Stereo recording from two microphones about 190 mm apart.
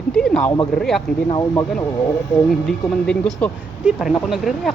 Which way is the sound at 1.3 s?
20° left (ahead or behind).